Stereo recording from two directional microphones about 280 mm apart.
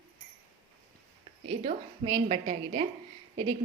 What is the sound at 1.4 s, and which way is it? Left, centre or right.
A woman's voice, centre.